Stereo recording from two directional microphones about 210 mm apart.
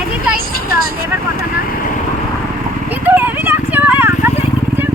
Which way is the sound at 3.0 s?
10° right (ahead or behind).